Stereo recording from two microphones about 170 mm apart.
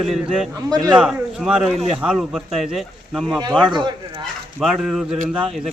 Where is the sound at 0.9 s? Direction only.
5° right (ahead or behind).